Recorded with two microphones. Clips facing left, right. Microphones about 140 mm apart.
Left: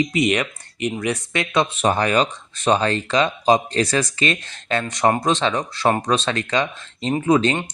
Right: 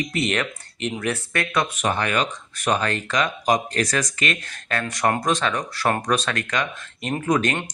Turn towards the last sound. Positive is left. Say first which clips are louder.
# left 4 dB
turn(degrees=25)  # may be behind; listen again after turning